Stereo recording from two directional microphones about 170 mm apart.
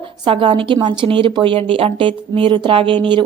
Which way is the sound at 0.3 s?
30° right (ahead or behind).